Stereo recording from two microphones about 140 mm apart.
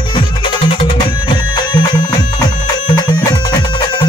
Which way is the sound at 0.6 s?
40° left (ahead or behind).